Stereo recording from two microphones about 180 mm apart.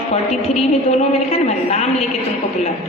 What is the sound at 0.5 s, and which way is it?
A woman's voice, 35° left (ahead or behind).